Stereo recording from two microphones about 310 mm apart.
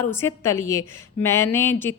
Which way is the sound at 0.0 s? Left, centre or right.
Centre.